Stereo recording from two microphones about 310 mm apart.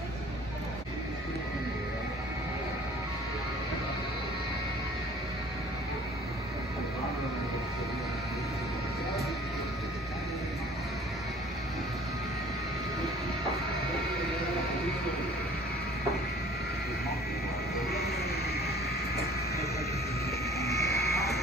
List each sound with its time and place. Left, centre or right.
20.5 s music: centre